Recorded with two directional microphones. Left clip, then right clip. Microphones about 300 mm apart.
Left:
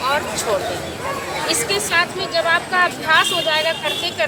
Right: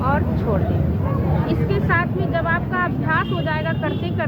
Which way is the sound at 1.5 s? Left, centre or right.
Centre.